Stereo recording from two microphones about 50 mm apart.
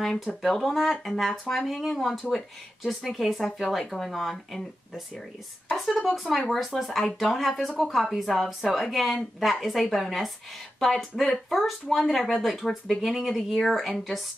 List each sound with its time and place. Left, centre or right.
0.0 s speech: centre